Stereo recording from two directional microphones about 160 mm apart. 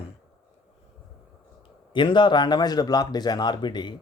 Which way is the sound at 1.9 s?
30° left (ahead or behind).